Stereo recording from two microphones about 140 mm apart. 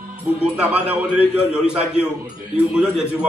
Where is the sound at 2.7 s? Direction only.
5° right (ahead or behind).